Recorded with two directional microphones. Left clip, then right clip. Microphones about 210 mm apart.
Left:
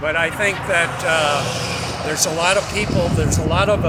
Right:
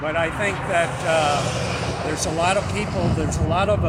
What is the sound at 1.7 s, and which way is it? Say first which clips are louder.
Vehicle: left 2 dB; 55° left (ahead or behind).